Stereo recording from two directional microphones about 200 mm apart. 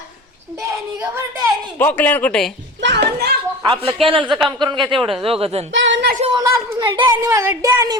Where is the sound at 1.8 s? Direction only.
10° left (ahead or behind).